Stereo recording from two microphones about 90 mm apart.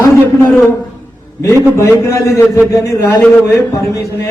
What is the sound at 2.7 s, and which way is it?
A man's voice, 35° left (ahead or behind).